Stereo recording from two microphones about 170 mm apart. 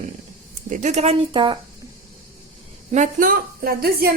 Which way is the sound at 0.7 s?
45° right (ahead or behind).